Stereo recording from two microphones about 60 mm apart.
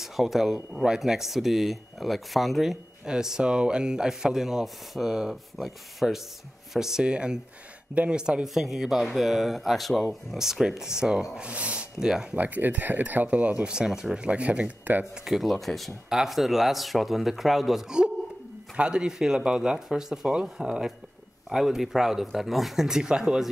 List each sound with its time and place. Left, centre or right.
0.0 s speech: centre
12.4 s speech: right
15.2 s speech: centre